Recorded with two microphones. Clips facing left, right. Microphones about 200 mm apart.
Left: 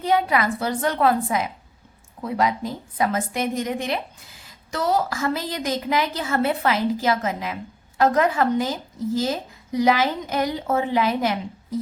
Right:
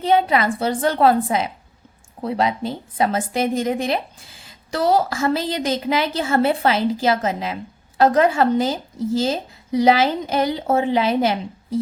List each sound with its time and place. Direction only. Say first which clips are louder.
0.0 s a woman's voice: right 3 dB; 25° right (ahead or behind)